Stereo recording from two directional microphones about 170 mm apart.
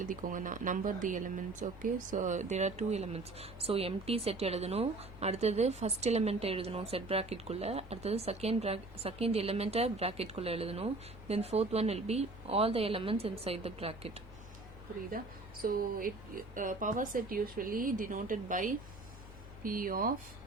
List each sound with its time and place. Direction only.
0.0 s speech: 50° right (ahead or behind); by 14.2 s 35° right (ahead or behind)
15.1 s speech: 55° right (ahead or behind)